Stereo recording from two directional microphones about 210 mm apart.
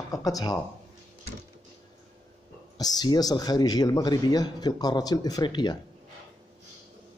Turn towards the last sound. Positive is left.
turn(degrees=20)  # may be behind; listen again after turning